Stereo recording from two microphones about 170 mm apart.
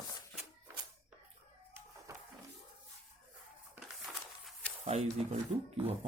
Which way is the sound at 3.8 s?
Centre (ahead or behind).